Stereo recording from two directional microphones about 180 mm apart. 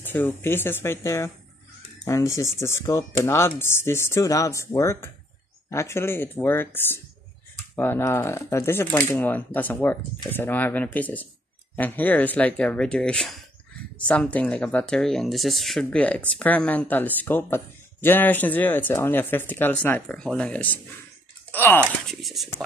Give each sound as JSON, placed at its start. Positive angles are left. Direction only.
{"t": 0.0, "sound": "speech", "side_deg": 10}
{"t": 21.5, "sound": "a sound", "side_deg": 10}
{"t": 22.0, "sound": "speech", "side_deg": 0}